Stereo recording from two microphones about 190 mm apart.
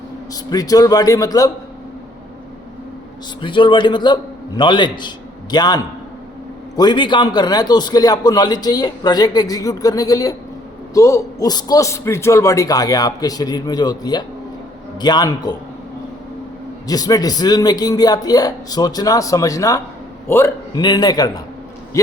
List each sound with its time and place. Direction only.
0.5 s a man's voice: 20° left (ahead or behind)
3.4 s a man's voice: 25° left (ahead or behind)
16.8 s a man's voice: 20° left (ahead or behind)